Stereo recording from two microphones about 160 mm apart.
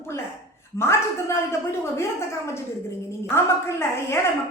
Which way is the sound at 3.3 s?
15° left (ahead or behind).